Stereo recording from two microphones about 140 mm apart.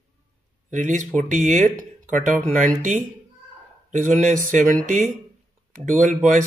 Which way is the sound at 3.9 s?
65° right (ahead or behind).